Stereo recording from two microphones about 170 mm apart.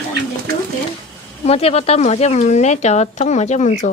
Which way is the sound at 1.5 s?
35° left (ahead or behind).